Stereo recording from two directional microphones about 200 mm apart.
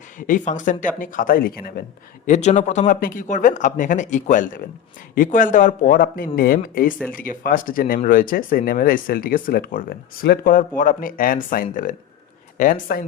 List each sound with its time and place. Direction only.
0.2 s speech: 40° left (ahead or behind)
2.2 s speech: 35° left (ahead or behind)